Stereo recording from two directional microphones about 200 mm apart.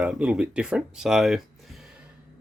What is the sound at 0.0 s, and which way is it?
Speech, 5° right (ahead or behind).